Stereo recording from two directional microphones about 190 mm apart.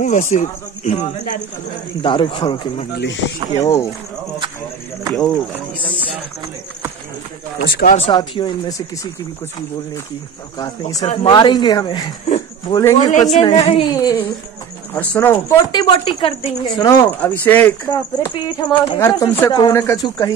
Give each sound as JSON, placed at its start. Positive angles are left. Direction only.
{"t": 0.0, "sound": "speech", "side_deg": 40}
{"t": 2.0, "sound": "speech", "side_deg": 25}
{"t": 5.1, "sound": "speech", "side_deg": 5}
{"t": 7.6, "sound": "speech", "side_deg": 55}
{"t": 8.0, "sound": "speech", "side_deg": 25}
{"t": 11.2, "sound": "speech", "side_deg": 20}
{"t": 12.3, "sound": "a sound", "side_deg": 25}
{"t": 12.9, "sound": "speech", "side_deg": 40}
{"t": 13.9, "sound": "speech", "side_deg": 20}
{"t": 15.9, "sound": "speech", "side_deg": 30}
{"t": 17.2, "sound": "speech", "side_deg": 10}
{"t": 17.9, "sound": "speech", "side_deg": 20}